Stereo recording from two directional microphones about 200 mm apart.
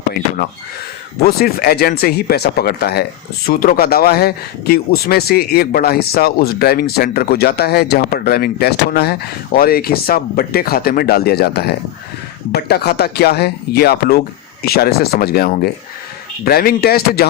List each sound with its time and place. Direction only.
1.2 s speech: 50° left (ahead or behind)